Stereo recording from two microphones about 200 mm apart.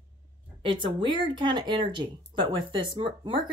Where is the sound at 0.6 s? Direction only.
25° right (ahead or behind).